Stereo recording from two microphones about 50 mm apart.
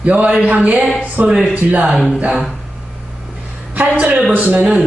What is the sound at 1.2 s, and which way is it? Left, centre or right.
Speech, right.